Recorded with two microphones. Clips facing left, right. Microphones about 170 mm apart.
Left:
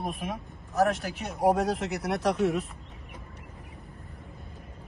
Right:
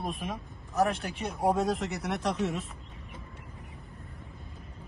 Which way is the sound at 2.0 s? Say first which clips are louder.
Left 4 dB; 40° left (ahead or behind).